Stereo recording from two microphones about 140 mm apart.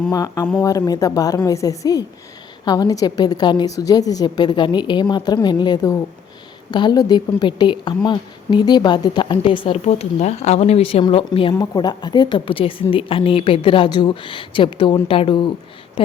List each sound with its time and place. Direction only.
0.1 s a woman's voice: 25° left (ahead or behind); by 11.5 s 40° left (ahead or behind)
11.5 s speech: 25° left (ahead or behind)